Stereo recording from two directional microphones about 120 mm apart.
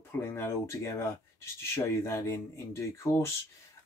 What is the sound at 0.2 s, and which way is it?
Speech, 20° left (ahead or behind).